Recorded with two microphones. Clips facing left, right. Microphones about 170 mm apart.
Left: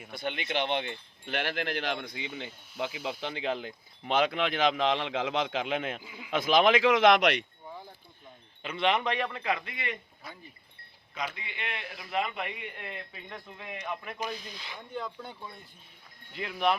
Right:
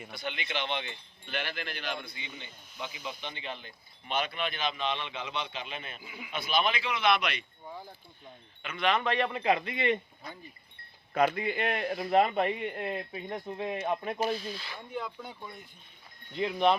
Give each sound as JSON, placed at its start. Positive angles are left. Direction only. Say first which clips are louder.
{"t": 0.1, "sound": "speech", "louder": "left 4 dB", "side_deg": 55}
{"t": 6.0, "sound": "speech", "louder": "right 1 dB", "side_deg": -15}
{"t": 6.3, "sound": "speech", "louder": "left 7 dB", "side_deg": 90}
{"t": 8.6, "sound": "speech", "louder": "left 1 dB", "side_deg": 25}
{"t": 9.3, "sound": "speech", "louder": "right 5 dB", "side_deg": -25}
{"t": 10.3, "sound": "speech", "louder": "right 1 dB", "side_deg": 5}
{"t": 11.3, "sound": "speech", "louder": "right 10 dB", "side_deg": -45}
{"t": 14.3, "sound": "speech", "louder": "right 5 dB", "side_deg": 15}
{"t": 14.9, "sound": "speech", "louder": "even", "side_deg": -5}